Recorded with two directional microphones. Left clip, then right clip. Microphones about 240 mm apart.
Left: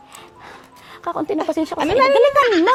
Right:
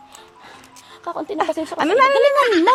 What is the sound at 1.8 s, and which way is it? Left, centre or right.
Speech, centre.